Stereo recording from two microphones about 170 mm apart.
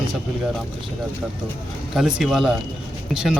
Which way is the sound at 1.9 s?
Centre (ahead or behind).